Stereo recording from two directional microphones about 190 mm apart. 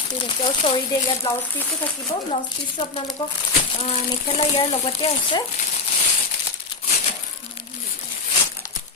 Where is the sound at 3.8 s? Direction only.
30° left (ahead or behind).